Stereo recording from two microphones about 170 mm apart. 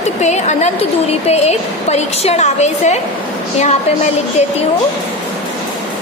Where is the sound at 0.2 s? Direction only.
40° left (ahead or behind).